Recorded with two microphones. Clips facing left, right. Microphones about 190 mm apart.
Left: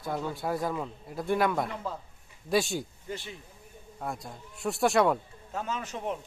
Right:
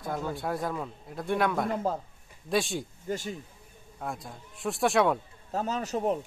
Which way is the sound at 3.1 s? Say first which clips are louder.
Right 6 dB; 45° right (ahead or behind).